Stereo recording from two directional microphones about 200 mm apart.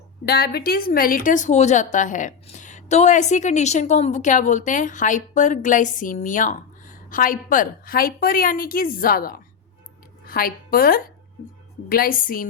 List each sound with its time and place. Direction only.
0.3 s a woman's voice: 50° left (ahead or behind)